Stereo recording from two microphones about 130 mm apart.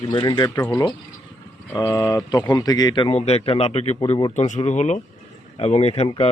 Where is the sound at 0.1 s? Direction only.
30° left (ahead or behind).